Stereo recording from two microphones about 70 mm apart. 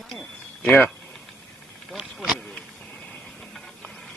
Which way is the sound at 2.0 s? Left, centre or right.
Centre.